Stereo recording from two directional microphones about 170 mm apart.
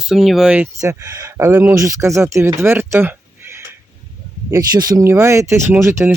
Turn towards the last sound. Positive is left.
turn(degrees=-15)  # may be behind; listen again after turning